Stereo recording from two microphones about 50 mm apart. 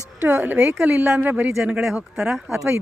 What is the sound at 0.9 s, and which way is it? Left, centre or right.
Speech, right.